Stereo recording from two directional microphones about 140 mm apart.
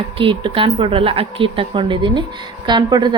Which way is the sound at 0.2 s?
40° right (ahead or behind).